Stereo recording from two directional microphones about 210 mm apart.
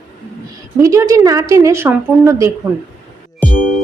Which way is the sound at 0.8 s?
15° right (ahead or behind).